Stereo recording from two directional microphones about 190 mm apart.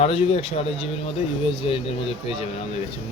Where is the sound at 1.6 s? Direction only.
30° left (ahead or behind).